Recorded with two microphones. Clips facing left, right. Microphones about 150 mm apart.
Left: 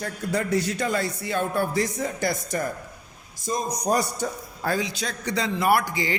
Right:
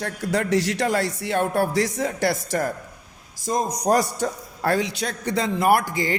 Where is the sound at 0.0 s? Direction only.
85° right.